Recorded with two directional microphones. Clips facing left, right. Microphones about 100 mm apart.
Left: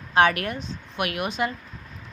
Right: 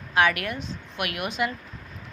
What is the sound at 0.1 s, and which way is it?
A woman's voice, 30° left (ahead or behind).